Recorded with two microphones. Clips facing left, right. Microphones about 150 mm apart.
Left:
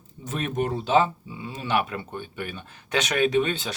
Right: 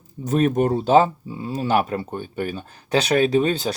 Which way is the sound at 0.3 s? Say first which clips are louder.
Right 8 dB; 40° right (ahead or behind).